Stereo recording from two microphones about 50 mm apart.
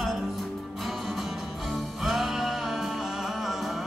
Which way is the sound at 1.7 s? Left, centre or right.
Centre.